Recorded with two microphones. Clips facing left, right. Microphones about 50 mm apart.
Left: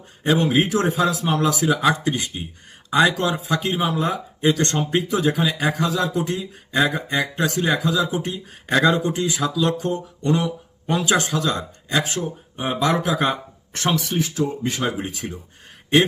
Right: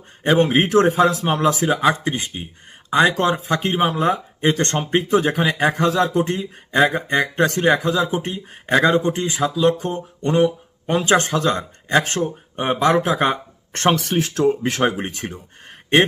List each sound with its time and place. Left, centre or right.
0.2 s speech: right
13.9 s speech: right